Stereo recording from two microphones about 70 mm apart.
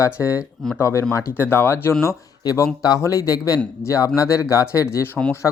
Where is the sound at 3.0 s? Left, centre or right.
Left.